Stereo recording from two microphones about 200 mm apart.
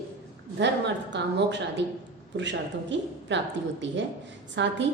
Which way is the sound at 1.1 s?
60° right (ahead or behind).